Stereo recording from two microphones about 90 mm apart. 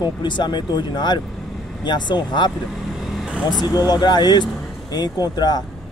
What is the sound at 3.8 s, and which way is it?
Speech, 50° left (ahead or behind).